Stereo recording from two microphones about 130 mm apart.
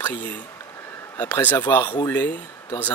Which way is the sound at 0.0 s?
15° left (ahead or behind).